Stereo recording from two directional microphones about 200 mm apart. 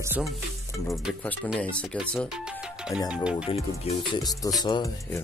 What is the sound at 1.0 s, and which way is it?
Speech, 5° left (ahead or behind).